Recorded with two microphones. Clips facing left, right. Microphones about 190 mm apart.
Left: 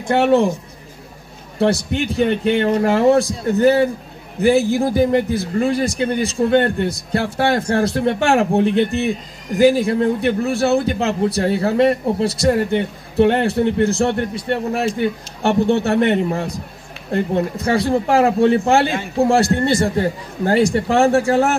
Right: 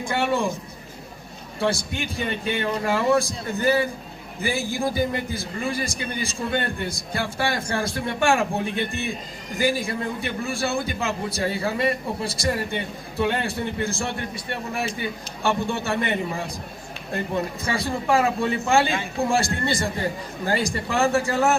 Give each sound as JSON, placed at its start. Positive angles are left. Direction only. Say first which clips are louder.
{"t": 0.1, "sound": "a man's voice", "louder": "left 10 dB", "side_deg": 70}
{"t": 1.6, "sound": "a man's voice", "louder": "left 8 dB", "side_deg": 70}
{"t": 17.6, "sound": "a man's voice", "louder": "left 8 dB", "side_deg": 65}